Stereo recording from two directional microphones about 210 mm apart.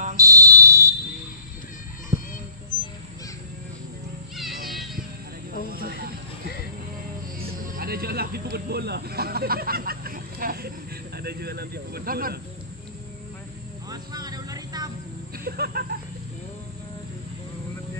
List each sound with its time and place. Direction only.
0.2 s fire alarm: 15° right (ahead or behind)
4.4 s music: centre (ahead or behind)
5.7 s a sound: 45° right (ahead or behind)
7.6 s snake: 45° right (ahead or behind)
11.1 s speech: 50° right (ahead or behind)
13.8 s vehicle: 20° right (ahead or behind)
15.3 s a sound: 45° right (ahead or behind)